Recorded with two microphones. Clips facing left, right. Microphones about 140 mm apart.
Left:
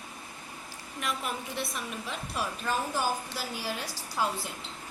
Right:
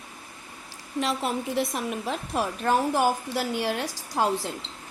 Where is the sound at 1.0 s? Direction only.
90° right.